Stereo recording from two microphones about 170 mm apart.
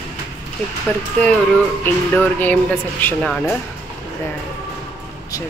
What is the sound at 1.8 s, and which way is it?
Speech, 10° left (ahead or behind).